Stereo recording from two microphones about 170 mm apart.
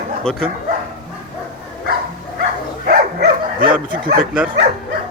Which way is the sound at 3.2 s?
55° right (ahead or behind).